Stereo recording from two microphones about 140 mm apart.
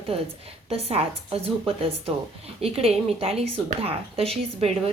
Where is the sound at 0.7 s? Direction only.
45° right (ahead or behind).